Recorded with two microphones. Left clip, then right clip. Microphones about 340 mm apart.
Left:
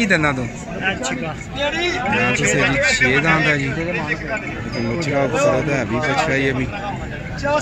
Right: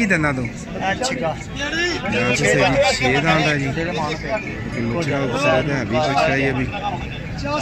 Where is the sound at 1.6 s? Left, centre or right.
Centre.